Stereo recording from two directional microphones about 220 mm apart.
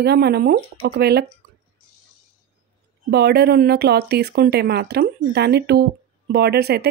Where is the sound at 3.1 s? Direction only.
50° right (ahead or behind).